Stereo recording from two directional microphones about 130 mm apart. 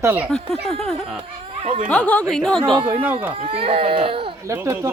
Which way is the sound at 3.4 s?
45° right (ahead or behind).